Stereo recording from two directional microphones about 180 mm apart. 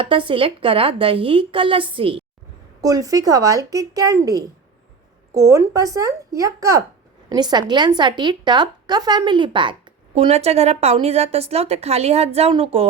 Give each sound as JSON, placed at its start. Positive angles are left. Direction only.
{"t": 0.0, "sound": "a woman's voice", "side_deg": -30}
{"t": 2.8, "sound": "a woman's voice", "side_deg": -20}